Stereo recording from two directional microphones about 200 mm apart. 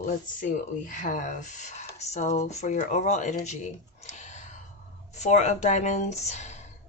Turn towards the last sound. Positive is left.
turn(degrees=35)  # may be behind; listen again after turning